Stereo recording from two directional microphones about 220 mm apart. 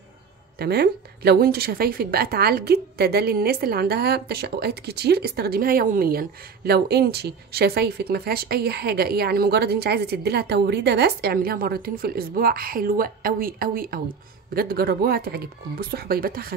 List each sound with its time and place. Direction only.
0.6 s a woman's voice: 45° right (ahead or behind)